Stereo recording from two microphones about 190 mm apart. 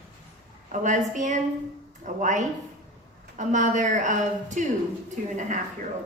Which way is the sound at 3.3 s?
40° right (ahead or behind).